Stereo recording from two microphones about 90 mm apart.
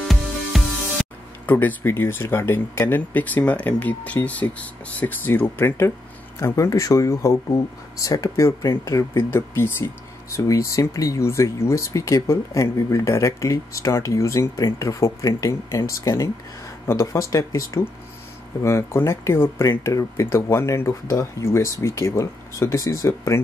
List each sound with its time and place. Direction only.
0.1 s music: centre (ahead or behind)
1.4 s speech: 20° left (ahead or behind)
6.4 s speech: 35° left (ahead or behind)
10.3 s speech: 35° left (ahead or behind)